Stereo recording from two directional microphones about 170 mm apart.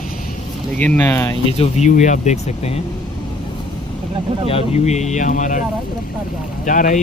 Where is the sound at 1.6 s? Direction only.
45° left (ahead or behind).